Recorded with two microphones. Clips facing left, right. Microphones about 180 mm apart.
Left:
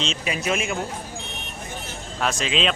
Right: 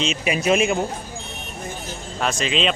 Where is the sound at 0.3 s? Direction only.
20° right (ahead or behind).